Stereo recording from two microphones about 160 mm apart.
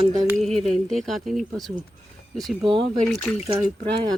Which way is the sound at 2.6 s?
30° right (ahead or behind).